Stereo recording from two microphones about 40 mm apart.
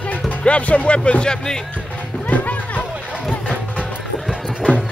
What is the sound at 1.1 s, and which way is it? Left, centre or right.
Speech, left.